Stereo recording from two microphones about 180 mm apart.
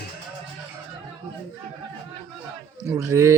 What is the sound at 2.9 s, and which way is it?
Speech, 15° right (ahead or behind).